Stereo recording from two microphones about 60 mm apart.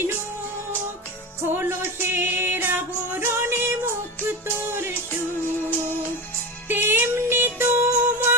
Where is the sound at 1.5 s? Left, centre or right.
Right.